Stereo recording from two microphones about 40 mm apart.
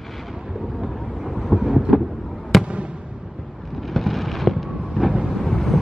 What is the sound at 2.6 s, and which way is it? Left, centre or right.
Fireworks, right.